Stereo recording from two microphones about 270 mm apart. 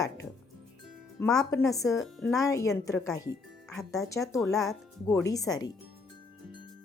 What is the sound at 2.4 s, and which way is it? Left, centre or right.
Speech, centre.